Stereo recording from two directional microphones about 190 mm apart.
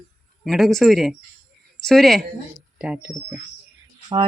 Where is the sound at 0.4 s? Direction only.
Centre (ahead or behind).